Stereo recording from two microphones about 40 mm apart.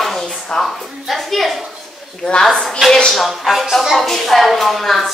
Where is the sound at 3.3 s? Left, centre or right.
Centre.